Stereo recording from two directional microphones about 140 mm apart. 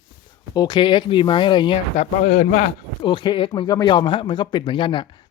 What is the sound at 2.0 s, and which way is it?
Speech, 55° left (ahead or behind).